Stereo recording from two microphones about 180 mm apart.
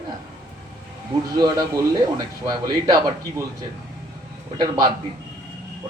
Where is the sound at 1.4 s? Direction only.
20° right (ahead or behind).